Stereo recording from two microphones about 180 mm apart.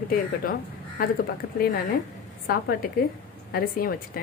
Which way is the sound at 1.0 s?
55° left (ahead or behind).